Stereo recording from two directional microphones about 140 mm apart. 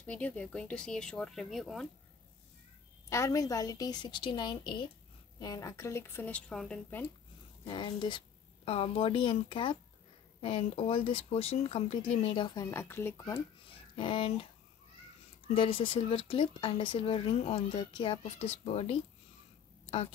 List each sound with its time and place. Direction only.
0.0 s speech: 10° left (ahead or behind)
3.1 s a woman's voice: 20° left (ahead or behind); by 7.0 s 5° left (ahead or behind)
7.6 s speech: 35° left (ahead or behind)
12.7 s speech: 15° left (ahead or behind)
13.9 s speech: 35° left (ahead or behind)
15.5 s speech: 40° left (ahead or behind)